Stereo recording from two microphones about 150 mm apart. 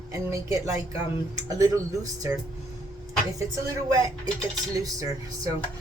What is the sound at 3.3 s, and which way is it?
Speech, 20° right (ahead or behind).